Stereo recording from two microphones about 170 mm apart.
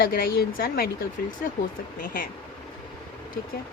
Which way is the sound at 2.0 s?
55° left (ahead or behind).